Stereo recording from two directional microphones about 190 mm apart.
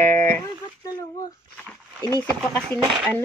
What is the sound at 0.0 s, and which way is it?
Guitar, 15° left (ahead or behind).